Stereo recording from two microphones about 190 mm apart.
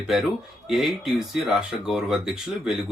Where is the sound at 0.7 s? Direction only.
Centre (ahead or behind).